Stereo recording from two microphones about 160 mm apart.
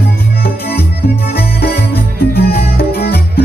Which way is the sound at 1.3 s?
75° left (ahead or behind).